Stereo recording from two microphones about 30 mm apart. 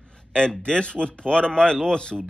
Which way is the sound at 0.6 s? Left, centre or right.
Left.